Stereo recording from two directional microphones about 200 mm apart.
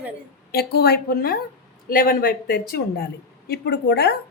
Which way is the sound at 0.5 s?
55° left (ahead or behind).